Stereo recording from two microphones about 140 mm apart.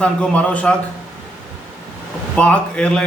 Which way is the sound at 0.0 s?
10° left (ahead or behind).